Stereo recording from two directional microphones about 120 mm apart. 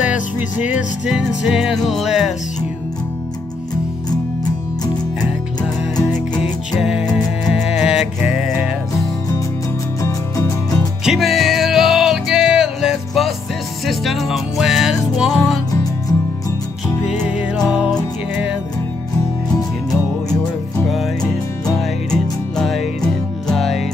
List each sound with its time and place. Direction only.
0.0 s music: 10° right (ahead or behind)
0.6 s music: 90° left
1.0 s music: 5° right (ahead or behind)
6.7 s music: 5° right (ahead or behind)
11.1 s music: 5° right (ahead or behind)
17.6 s music: 5° right (ahead or behind)
20.9 s music: centre (ahead or behind)